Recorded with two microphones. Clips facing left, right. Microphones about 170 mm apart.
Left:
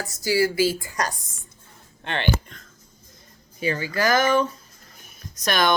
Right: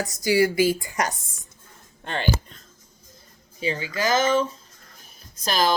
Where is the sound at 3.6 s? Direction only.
20° right (ahead or behind).